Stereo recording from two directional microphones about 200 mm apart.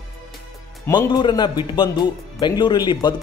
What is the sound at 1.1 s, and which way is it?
Speech, 20° left (ahead or behind).